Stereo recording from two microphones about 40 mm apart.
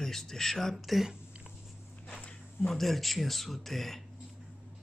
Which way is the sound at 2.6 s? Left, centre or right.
Centre.